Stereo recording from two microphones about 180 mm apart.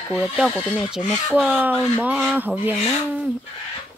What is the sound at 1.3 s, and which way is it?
Speech, 10° right (ahead or behind).